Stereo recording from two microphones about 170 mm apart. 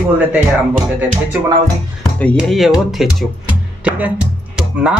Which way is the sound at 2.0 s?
5° left (ahead or behind).